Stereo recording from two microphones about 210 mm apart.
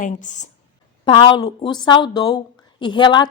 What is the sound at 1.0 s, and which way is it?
A woman's voice, 25° left (ahead or behind).